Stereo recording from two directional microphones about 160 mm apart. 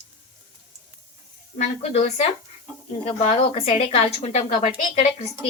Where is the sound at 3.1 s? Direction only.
40° left (ahead or behind).